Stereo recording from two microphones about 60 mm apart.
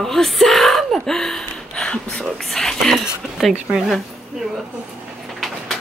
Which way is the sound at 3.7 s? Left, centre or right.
Centre.